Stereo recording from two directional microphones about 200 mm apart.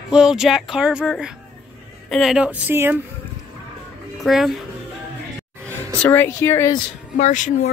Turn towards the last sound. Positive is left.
turn(degrees=35)  # may be behind; listen again after turning